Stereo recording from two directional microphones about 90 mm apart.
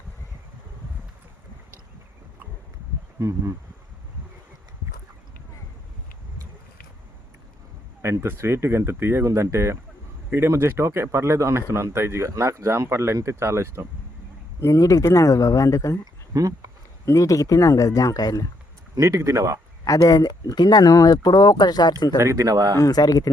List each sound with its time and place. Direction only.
3.2 s speech: 35° right (ahead or behind)
8.0 s speech: 30° right (ahead or behind)
14.6 s speech: 35° left (ahead or behind)
16.3 s a sound: 40° right (ahead or behind)
17.1 s speech: 35° left (ahead or behind)
18.9 s speech: 40° right (ahead or behind)
19.8 s speech: 45° left (ahead or behind)
22.2 s speech: 35° right (ahead or behind)
22.8 s speech: 45° left (ahead or behind)